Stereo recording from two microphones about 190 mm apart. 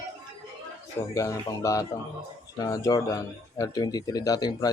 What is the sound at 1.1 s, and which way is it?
Speech, 15° left (ahead or behind).